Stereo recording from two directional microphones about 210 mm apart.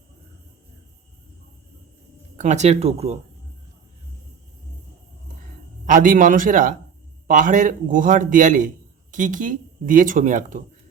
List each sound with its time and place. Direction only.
2.3 s speech: 35° right (ahead or behind)
5.8 s speech: 40° right (ahead or behind)